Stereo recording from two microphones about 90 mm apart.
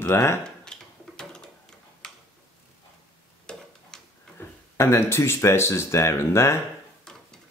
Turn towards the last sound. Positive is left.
turn(degrees=10)  # may be behind; listen again after turning